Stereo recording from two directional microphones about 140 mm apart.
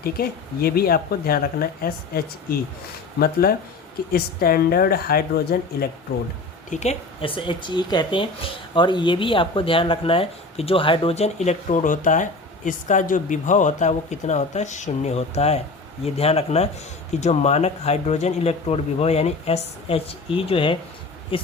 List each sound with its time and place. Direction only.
0.0 s speech: 90° left
4.1 s speech: 90° left
6.7 s speech: 55° left (ahead or behind)
7.2 s speech: 40° left (ahead or behind)